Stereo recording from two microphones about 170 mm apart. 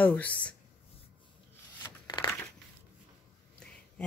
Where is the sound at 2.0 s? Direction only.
25° left (ahead or behind).